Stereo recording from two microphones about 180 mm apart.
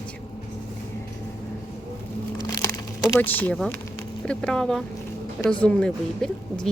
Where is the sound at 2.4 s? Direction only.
20° left (ahead or behind).